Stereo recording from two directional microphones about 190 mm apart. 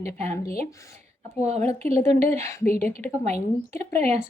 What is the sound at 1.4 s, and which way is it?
Speech, 35° right (ahead or behind).